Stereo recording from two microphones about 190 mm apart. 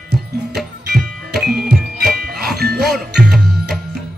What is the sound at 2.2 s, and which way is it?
Music, 55° right (ahead or behind).